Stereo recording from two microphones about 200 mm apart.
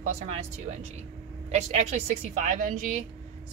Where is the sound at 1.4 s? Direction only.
35° right (ahead or behind).